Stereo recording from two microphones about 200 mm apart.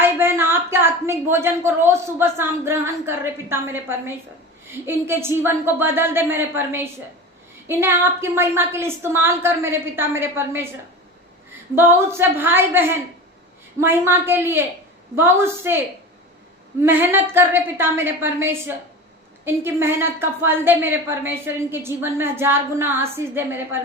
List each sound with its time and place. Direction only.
0.0 s a woman's voice: 10° right (ahead or behind)
11.7 s a woman's voice: 10° right (ahead or behind)
16.8 s a woman's voice: 10° right (ahead or behind)